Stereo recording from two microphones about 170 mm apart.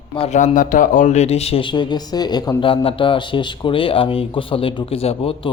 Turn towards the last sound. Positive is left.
turn(degrees=35)  # may be behind; listen again after turning